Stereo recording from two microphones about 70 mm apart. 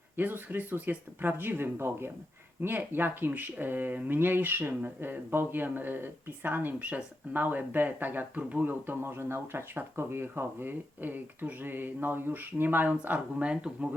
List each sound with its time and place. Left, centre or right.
0.2 s speech: right
8.9 s speech: right; by 13.7 s centre